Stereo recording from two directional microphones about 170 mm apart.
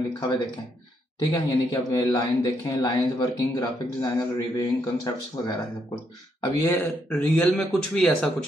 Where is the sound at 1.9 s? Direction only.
20° left (ahead or behind).